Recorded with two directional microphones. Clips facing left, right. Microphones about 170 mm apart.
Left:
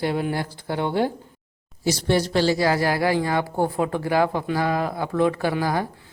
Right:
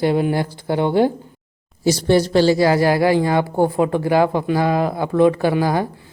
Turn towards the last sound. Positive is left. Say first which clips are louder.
# right 5 dB
turn(degrees=-20)  # may be behind; listen again after turning